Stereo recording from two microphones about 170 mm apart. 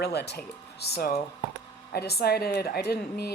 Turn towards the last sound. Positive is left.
turn(degrees=70)  # may be behind; listen again after turning